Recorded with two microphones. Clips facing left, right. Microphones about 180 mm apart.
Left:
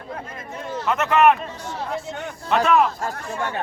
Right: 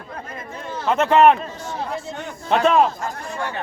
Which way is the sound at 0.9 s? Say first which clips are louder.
Right 3 dB; 30° right (ahead or behind).